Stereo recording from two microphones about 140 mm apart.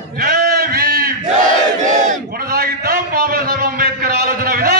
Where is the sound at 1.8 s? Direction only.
65° right (ahead or behind).